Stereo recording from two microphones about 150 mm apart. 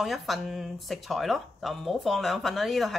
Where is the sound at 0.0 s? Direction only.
Centre (ahead or behind).